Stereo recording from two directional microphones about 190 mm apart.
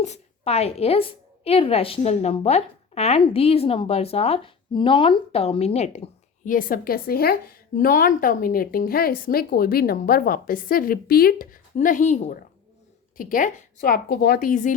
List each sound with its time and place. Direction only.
0.0 s a woman's voice: 35° left (ahead or behind)